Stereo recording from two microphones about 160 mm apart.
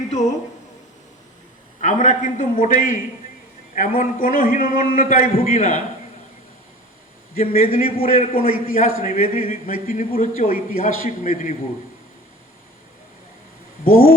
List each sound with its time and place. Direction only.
0.1 s a man's voice: 45° left (ahead or behind)
1.8 s a man's voice: 50° left (ahead or behind)
7.3 s a man's voice: 60° left (ahead or behind)
13.8 s a man's voice: 60° left (ahead or behind)